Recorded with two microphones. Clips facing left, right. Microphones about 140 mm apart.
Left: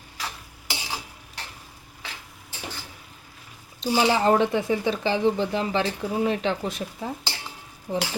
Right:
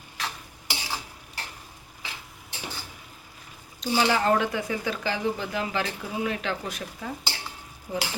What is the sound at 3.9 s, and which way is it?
Speech, 15° left (ahead or behind).